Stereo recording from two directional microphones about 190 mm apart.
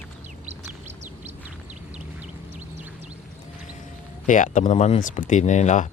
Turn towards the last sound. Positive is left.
turn(degrees=40)  # may be behind; listen again after turning